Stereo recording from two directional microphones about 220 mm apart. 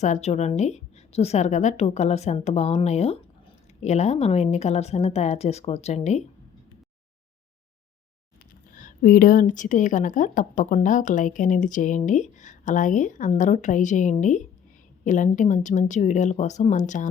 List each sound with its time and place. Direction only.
0.0 s a woman's voice: 30° left (ahead or behind)
8.7 s speech: 35° left (ahead or behind)